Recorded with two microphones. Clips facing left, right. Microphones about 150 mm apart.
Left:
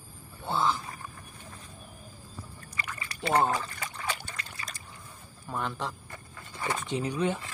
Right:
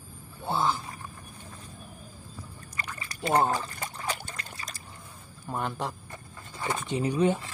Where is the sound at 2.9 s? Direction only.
40° right (ahead or behind).